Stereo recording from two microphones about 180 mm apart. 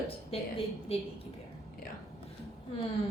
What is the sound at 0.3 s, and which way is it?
Speech, 35° left (ahead or behind).